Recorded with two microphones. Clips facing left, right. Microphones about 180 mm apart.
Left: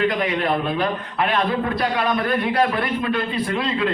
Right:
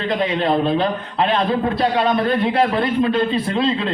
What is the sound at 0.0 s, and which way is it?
A man's voice, 25° right (ahead or behind).